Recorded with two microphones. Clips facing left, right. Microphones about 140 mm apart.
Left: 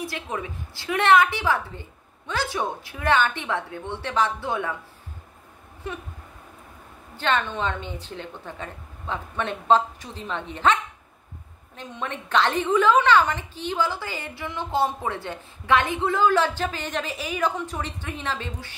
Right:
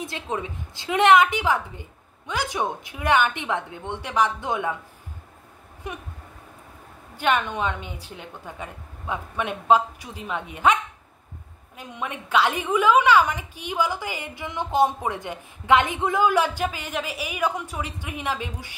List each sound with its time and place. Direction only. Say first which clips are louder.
0.0 s a woman's voice: right 1 dB; 20° right (ahead or behind)
5.9 s a woman's voice: left 1 dB; 15° right (ahead or behind)
7.2 s a woman's voice: right 1 dB; 10° right (ahead or behind)